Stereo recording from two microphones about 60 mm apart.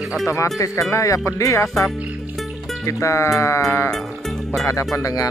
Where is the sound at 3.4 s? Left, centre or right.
Left.